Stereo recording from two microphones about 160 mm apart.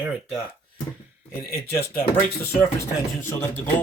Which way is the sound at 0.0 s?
5° right (ahead or behind).